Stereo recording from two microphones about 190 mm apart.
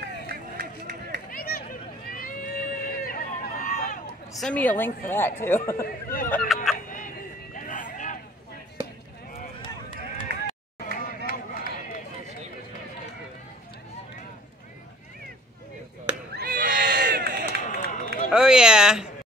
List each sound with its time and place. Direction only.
0.0 s run: 50° right (ahead or behind)
1.3 s a sound: 50° left (ahead or behind)
2.0 s run: 50° left (ahead or behind)
4.4 s speech: 5° left (ahead or behind)
5.9 s speech: 50° left (ahead or behind)
6.4 s speech: centre (ahead or behind)
6.9 s a sound: 45° left (ahead or behind)
10.3 s run: 65° right (ahead or behind)
10.8 s run: 50° left (ahead or behind)
16.3 s a sound: 50° right (ahead or behind)
17.7 s run: 45° left (ahead or behind)
18.3 s a sound: 5° right (ahead or behind)